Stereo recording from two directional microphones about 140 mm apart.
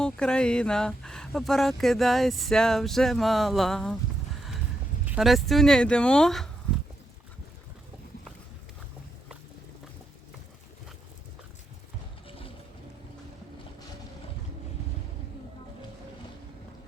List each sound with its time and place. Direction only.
0.0 s speech: 5° left (ahead or behind)
5.0 s speech: 5° right (ahead or behind)